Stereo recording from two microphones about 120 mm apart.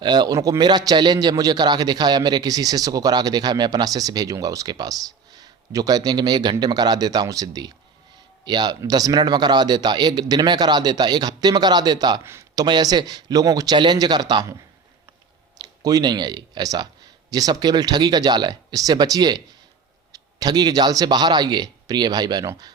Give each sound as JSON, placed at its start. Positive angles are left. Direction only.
{"t": 0.0, "sound": "a man's voice", "side_deg": -35}
{"t": 12.2, "sound": "a man's voice", "side_deg": -20}
{"t": 12.6, "sound": "a man's voice", "side_deg": -35}